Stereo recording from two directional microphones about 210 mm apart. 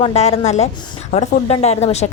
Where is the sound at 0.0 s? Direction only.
30° left (ahead or behind).